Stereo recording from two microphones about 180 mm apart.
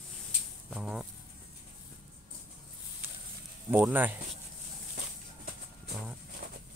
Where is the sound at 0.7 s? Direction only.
5° right (ahead or behind).